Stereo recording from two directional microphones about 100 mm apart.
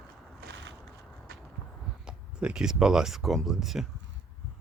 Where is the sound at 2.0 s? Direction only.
10° right (ahead or behind).